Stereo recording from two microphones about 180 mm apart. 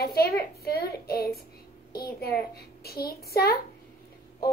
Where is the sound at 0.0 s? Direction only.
60° left (ahead or behind).